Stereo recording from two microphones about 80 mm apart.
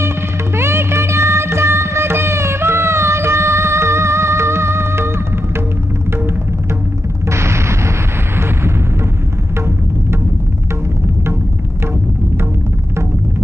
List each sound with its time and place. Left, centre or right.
0.6 s music: right
7.2 s artillery fire: right